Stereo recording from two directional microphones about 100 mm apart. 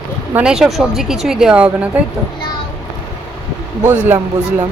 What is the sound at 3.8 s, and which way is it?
Speech, 20° right (ahead or behind).